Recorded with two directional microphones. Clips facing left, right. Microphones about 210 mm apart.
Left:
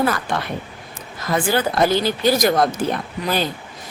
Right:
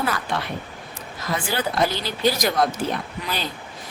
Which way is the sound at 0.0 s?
45° left (ahead or behind).